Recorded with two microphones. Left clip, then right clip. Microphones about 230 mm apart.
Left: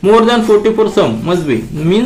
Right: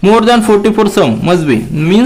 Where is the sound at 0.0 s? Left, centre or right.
Right.